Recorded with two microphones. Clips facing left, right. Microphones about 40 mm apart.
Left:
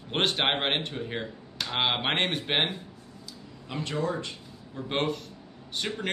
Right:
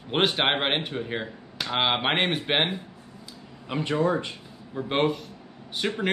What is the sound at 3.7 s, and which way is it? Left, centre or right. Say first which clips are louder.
A man's voice: right 6 dB; right.